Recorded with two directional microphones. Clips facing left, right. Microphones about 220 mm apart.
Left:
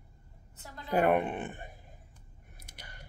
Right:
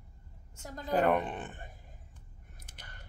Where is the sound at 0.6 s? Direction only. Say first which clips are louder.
Right 5 dB; 45° right (ahead or behind).